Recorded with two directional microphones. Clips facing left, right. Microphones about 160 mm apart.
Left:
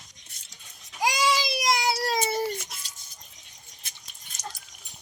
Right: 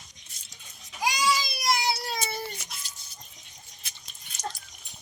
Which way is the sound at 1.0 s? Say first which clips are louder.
Left 2 dB; 90° left.